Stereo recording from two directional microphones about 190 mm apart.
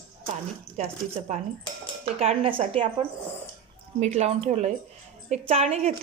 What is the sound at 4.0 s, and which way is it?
A woman's voice, 35° right (ahead or behind).